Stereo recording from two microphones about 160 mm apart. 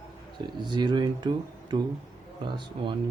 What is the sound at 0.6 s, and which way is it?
Speech, 30° right (ahead or behind).